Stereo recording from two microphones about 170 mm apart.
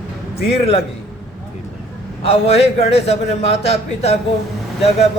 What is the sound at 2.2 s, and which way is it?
A man's voice, 35° left (ahead or behind).